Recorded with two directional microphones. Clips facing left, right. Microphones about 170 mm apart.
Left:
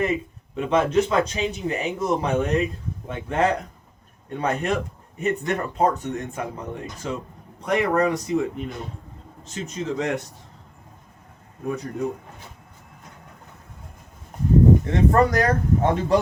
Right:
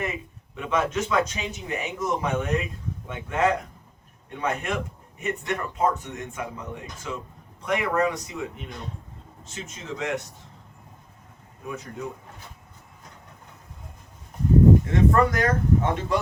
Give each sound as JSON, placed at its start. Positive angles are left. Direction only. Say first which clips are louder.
{"t": 0.0, "sound": "speech", "louder": "left 7 dB", "side_deg": 30}
{"t": 11.6, "sound": "speech", "louder": "left 7 dB", "side_deg": 40}
{"t": 14.9, "sound": "speech", "louder": "left 2 dB", "side_deg": 35}